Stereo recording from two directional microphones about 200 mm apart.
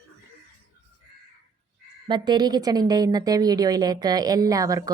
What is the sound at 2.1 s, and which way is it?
A woman's voice, 20° right (ahead or behind).